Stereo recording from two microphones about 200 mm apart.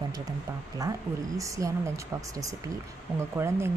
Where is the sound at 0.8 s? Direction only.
15° right (ahead or behind).